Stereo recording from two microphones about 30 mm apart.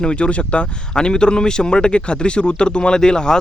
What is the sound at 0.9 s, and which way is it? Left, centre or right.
Speech, left.